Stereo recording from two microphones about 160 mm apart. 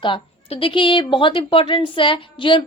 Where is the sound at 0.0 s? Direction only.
35° left (ahead or behind).